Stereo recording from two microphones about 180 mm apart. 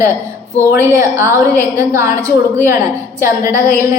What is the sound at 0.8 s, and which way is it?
A woman's voice, 15° right (ahead or behind).